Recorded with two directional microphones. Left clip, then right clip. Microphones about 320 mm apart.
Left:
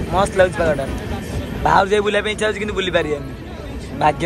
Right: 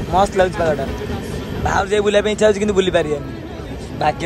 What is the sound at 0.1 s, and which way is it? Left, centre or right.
A man's voice, centre.